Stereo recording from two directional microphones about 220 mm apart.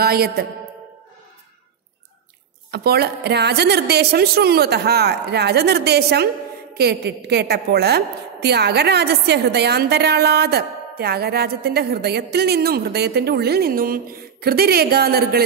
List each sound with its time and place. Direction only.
0.0 s a woman's voice: 45° right (ahead or behind)
2.7 s a woman's voice: 45° right (ahead or behind)